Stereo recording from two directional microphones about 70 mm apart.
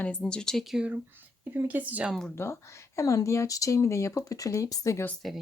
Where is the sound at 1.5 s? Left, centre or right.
Right.